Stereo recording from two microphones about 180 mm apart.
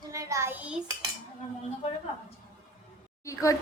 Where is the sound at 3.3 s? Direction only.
15° left (ahead or behind).